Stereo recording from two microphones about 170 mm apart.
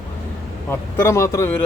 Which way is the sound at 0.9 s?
15° left (ahead or behind).